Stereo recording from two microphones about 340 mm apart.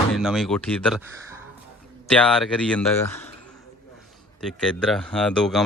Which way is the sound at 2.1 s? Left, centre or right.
Centre.